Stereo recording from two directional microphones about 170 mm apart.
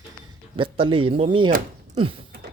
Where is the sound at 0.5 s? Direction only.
30° right (ahead or behind).